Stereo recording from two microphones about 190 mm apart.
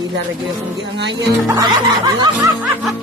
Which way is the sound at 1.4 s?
20° right (ahead or behind).